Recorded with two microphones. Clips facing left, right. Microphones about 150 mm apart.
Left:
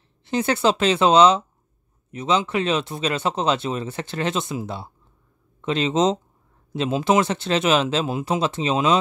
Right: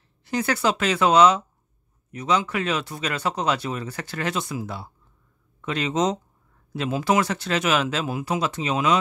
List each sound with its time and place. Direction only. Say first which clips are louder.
0.2 s speech: left 3 dB; 25° left (ahead or behind)